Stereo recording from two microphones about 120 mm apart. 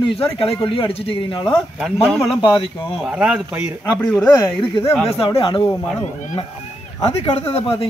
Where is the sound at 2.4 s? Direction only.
45° left (ahead or behind).